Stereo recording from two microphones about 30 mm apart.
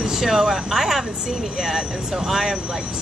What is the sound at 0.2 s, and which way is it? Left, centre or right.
Speech, centre.